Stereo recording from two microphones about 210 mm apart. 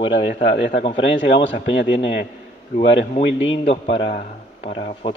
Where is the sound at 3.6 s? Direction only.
30° left (ahead or behind).